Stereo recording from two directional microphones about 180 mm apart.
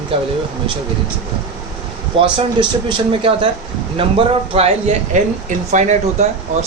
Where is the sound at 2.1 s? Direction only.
30° right (ahead or behind).